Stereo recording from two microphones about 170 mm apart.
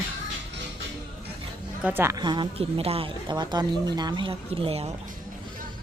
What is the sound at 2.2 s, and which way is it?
Speech, 25° right (ahead or behind).